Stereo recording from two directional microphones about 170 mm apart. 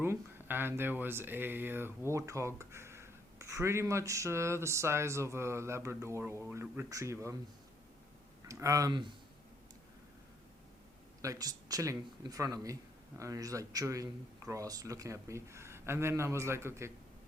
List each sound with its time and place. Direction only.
0.0 s speech: 15° right (ahead or behind)
8.4 s speech: 20° right (ahead or behind)
11.2 s speech: 20° right (ahead or behind)